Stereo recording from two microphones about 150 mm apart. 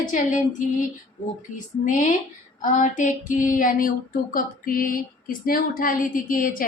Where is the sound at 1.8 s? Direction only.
55° left (ahead or behind).